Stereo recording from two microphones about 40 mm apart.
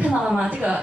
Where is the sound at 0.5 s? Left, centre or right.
Right.